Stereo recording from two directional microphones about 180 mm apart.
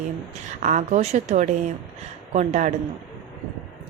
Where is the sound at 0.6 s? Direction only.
45° right (ahead or behind).